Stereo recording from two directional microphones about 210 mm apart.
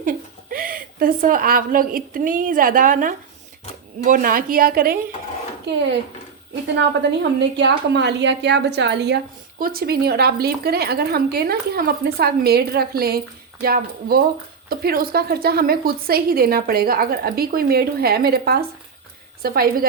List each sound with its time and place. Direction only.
0.0 s a woman's voice: 40° right (ahead or behind)
7.2 s a woman's voice: 55° right (ahead or behind)